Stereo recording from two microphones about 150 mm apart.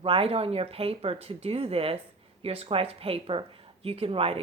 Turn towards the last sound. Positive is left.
turn(degrees=-40)  # may be behind; listen again after turning